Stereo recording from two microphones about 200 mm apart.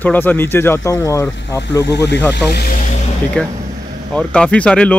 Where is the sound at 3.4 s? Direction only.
5° left (ahead or behind).